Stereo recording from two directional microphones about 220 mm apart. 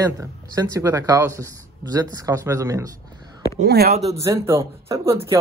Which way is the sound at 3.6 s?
45° right (ahead or behind).